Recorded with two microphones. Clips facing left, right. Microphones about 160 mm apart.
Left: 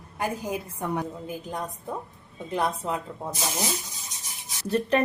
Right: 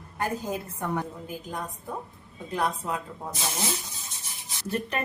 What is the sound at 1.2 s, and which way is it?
A woman's voice, 20° left (ahead or behind).